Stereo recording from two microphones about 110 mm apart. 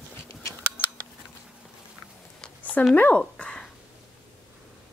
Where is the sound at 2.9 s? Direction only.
15° left (ahead or behind).